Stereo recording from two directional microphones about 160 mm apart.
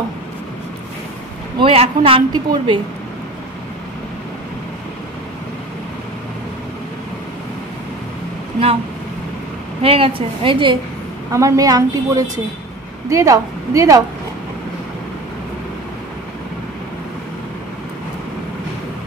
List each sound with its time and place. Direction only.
1.6 s a woman's voice: 35° right (ahead or behind)
9.8 s a woman's voice: 35° right (ahead or behind)
11.3 s a woman's voice: 20° right (ahead or behind)